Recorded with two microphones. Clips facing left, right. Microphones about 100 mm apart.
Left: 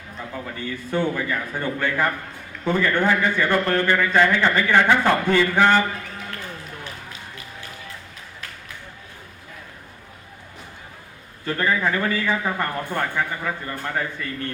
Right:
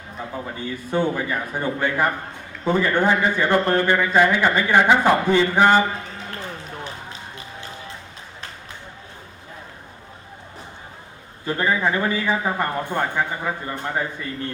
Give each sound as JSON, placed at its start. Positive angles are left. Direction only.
{"t": 0.2, "sound": "a man's voice", "side_deg": -20}
{"t": 11.4, "sound": "a man's voice", "side_deg": -20}